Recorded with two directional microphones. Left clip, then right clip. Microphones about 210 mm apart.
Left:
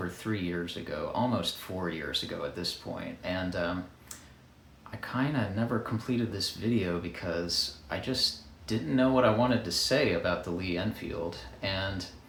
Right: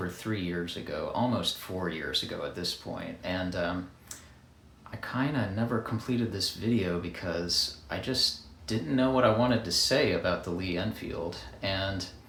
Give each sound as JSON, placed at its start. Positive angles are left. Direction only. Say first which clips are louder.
{"t": 0.2, "sound": "speech", "louder": "even", "side_deg": 0}
{"t": 4.9, "sound": "speech", "louder": "even", "side_deg": 0}